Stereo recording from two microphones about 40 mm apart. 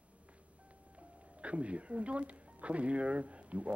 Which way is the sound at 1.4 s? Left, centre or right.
Right.